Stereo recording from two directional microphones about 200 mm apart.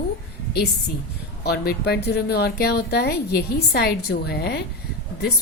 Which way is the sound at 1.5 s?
55° left (ahead or behind).